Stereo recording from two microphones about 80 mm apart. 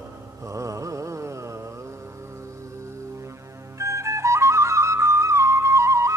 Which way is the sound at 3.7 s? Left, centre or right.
Right.